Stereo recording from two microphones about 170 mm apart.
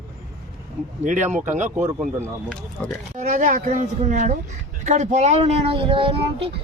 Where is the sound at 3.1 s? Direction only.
45° right (ahead or behind).